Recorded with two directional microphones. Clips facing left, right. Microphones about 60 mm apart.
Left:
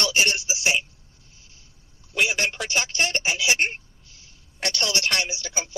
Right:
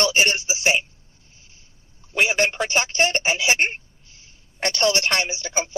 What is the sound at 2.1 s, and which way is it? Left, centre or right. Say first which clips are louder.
A man's voice: right 4 dB; right.